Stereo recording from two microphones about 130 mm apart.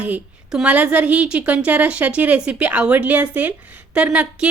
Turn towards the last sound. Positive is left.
turn(degrees=-10)  # may be behind; listen again after turning